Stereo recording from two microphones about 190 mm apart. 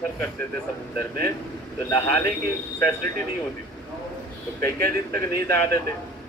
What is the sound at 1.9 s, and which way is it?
Speech, 15° left (ahead or behind).